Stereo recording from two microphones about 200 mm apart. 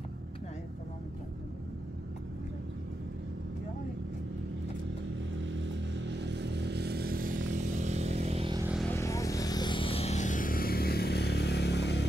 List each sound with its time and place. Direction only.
5.4 s vehicle: 65° right (ahead or behind); by 7.3 s 45° right (ahead or behind)
7.8 s motorcycle: 35° right (ahead or behind)
8.7 s vehicle: 10° left (ahead or behind); by 12.1 s 60° left (ahead or behind)